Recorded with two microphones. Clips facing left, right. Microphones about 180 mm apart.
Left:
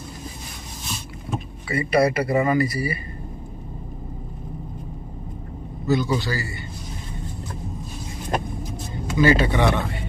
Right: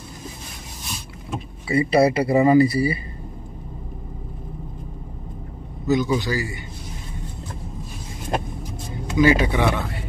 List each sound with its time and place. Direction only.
1.7 s speech: 25° right (ahead or behind)
5.9 s a man's voice: 15° right (ahead or behind)
9.1 s a man's voice: 10° right (ahead or behind)